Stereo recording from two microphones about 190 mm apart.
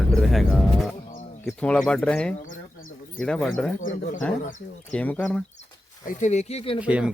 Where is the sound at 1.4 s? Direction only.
5° left (ahead or behind).